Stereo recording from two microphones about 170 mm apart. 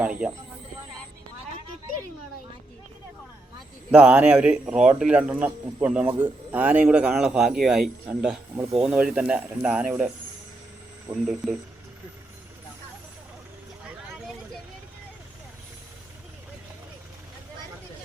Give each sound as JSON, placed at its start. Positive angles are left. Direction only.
{"t": 0.0, "sound": "speech", "side_deg": -10}
{"t": 3.9, "sound": "a man's voice", "side_deg": -5}
{"t": 11.1, "sound": "a man's voice", "side_deg": 0}